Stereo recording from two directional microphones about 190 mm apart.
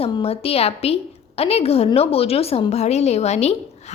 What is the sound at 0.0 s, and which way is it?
A woman's voice, 30° left (ahead or behind).